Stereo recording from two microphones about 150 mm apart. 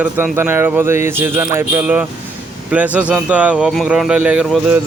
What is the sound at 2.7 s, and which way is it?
Speech, 10° right (ahead or behind).